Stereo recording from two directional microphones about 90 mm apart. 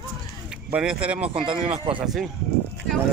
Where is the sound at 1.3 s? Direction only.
75° right (ahead or behind).